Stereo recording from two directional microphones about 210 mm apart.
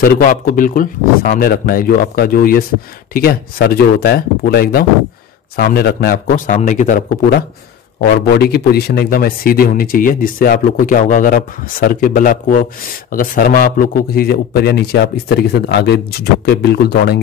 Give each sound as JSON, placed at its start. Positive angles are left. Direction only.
{"t": 0.0, "sound": "a man's voice", "side_deg": 40}